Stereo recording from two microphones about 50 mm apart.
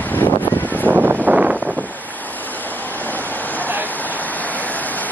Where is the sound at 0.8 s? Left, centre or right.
Right.